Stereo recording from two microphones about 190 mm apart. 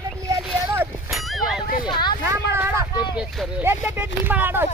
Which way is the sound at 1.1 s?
Centre (ahead or behind).